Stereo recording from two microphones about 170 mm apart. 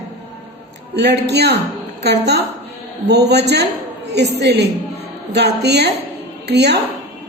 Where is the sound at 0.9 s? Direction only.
80° right.